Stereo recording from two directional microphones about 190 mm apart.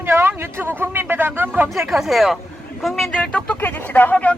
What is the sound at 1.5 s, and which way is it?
A man's voice, 10° right (ahead or behind).